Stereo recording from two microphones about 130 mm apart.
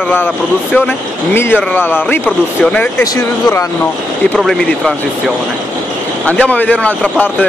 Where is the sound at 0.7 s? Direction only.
15° left (ahead or behind).